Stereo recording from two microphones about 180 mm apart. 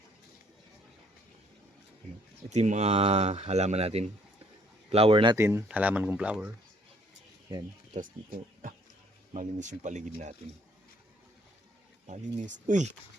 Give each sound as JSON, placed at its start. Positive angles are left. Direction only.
{"t": 2.5, "sound": "speech", "side_deg": -40}
{"t": 5.4, "sound": "speech", "side_deg": -15}
{"t": 7.5, "sound": "speech", "side_deg": -25}
{"t": 7.9, "sound": "speech", "side_deg": -45}
{"t": 12.0, "sound": "speech", "side_deg": -40}